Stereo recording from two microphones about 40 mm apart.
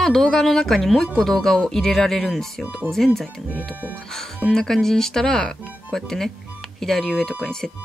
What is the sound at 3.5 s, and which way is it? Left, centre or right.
Speech, right.